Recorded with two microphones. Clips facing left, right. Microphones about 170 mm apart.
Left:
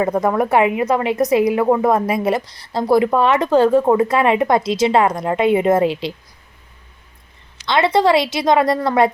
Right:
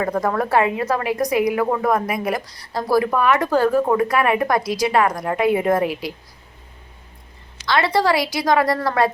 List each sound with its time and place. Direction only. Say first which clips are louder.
0.0 s a woman's voice: left 4 dB; 20° left (ahead or behind)
7.7 s a woman's voice: left 4 dB; 20° left (ahead or behind)